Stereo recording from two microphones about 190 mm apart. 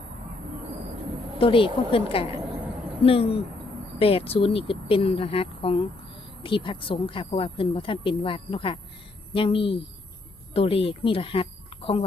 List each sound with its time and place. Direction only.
1.4 s speech: 30° left (ahead or behind)